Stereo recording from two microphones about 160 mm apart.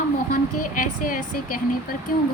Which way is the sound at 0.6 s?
60° left (ahead or behind).